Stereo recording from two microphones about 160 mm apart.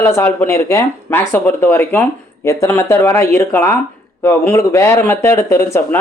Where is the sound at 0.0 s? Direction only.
15° left (ahead or behind).